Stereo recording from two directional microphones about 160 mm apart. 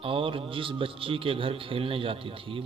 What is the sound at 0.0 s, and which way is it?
A man's voice, 35° right (ahead or behind).